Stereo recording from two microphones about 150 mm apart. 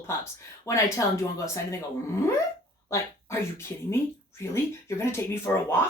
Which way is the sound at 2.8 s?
20° left (ahead or behind).